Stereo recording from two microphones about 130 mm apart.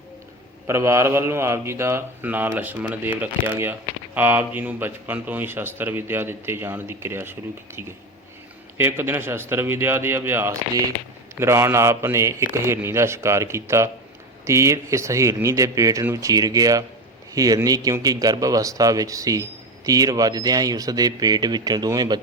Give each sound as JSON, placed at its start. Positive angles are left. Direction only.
{"t": 0.7, "sound": "speech", "side_deg": -20}
{"t": 8.8, "sound": "speech", "side_deg": -15}